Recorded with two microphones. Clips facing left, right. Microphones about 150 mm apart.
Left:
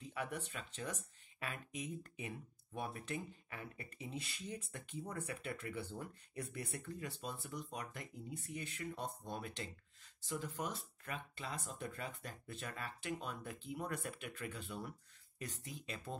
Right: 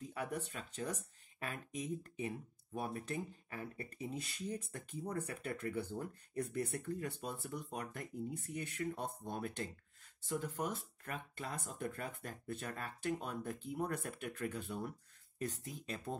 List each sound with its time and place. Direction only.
0.0 s speech: 45° right (ahead or behind)